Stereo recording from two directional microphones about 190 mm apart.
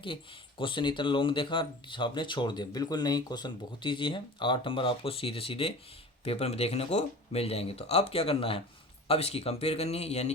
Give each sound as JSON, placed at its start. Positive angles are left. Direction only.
{"t": 0.6, "sound": "speech", "side_deg": 25}